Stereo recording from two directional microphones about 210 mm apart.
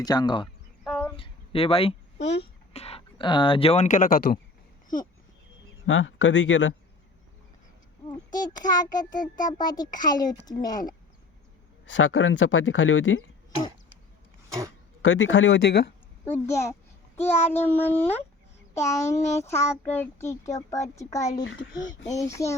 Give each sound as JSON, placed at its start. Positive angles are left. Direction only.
{"t": 0.0, "sound": "a child's voice", "side_deg": 20}
{"t": 0.9, "sound": "a sound", "side_deg": 0}
{"t": 1.1, "sound": "a sound", "side_deg": 25}
{"t": 2.4, "sound": "speech", "side_deg": 30}
{"t": 5.8, "sound": "speech", "side_deg": 65}
{"t": 8.3, "sound": "a child's voice", "side_deg": 20}
{"t": 9.1, "sound": "a child's voice", "side_deg": 40}
{"t": 9.6, "sound": "a child's voice", "side_deg": 20}
{"t": 11.9, "sound": "speech", "side_deg": 65}
{"t": 15.0, "sound": "speech", "side_deg": 65}
{"t": 16.2, "sound": "a child's voice", "side_deg": 10}
{"t": 21.4, "sound": "speech", "side_deg": 60}
{"t": 22.3, "sound": "a child's voice", "side_deg": 15}